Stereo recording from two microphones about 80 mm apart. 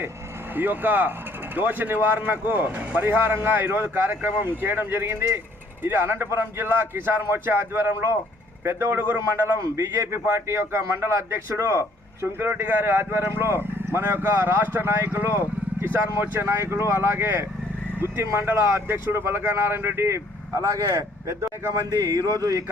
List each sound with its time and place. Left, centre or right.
0.5 s a man's voice: right
9.7 s a man's voice: right